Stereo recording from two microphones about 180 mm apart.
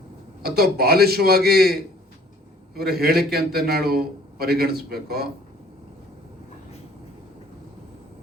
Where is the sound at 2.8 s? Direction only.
60° right (ahead or behind).